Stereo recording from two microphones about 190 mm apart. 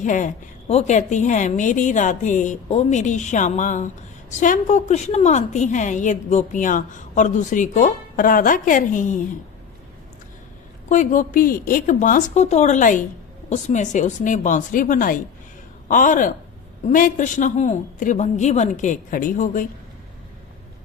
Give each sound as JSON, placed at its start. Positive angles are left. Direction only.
{"t": 0.0, "sound": "a woman's voice", "side_deg": 40}
{"t": 10.8, "sound": "a woman's voice", "side_deg": 40}